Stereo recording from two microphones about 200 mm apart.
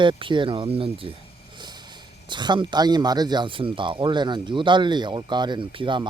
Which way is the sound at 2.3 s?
20° right (ahead or behind).